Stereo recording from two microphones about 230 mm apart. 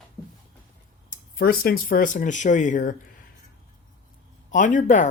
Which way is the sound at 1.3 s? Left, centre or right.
Left.